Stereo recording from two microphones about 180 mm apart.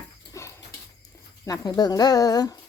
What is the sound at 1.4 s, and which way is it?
Speech, 20° left (ahead or behind).